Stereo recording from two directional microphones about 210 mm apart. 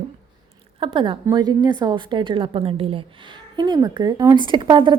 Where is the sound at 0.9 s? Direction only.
25° right (ahead or behind).